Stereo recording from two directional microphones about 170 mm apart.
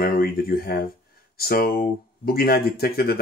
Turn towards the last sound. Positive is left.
turn(degrees=65)  # may be behind; listen again after turning